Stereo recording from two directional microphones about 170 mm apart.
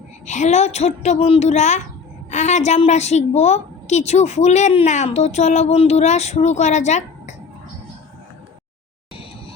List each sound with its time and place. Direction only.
0.3 s a woman's voice: 45° left (ahead or behind)